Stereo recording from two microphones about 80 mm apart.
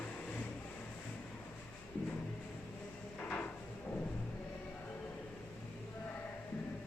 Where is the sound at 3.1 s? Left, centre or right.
Centre.